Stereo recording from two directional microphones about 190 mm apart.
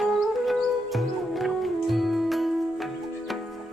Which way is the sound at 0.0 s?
Centre (ahead or behind).